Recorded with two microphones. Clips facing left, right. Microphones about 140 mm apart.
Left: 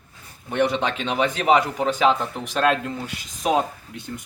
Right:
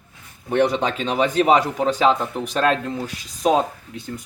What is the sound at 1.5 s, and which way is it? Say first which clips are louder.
Speech: right 2 dB; 35° right (ahead or behind).